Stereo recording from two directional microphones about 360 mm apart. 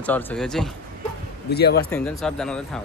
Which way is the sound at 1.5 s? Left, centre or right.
Left.